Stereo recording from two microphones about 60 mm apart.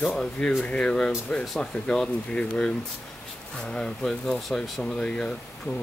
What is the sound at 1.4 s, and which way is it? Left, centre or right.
Speech, centre.